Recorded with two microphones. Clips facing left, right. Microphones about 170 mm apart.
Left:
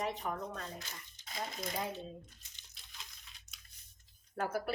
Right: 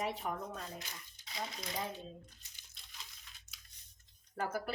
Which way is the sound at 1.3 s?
45° left (ahead or behind).